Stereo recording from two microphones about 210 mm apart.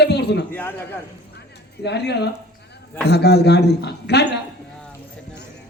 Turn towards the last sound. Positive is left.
turn(degrees=50)  # may be behind; listen again after turning